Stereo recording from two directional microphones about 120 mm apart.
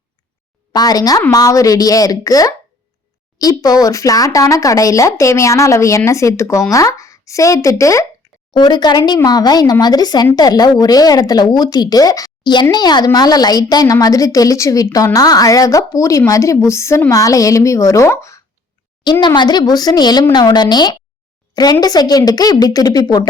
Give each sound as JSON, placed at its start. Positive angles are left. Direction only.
{"t": 0.7, "sound": "a woman's voice", "side_deg": 35}
{"t": 19.2, "sound": "speech", "side_deg": 40}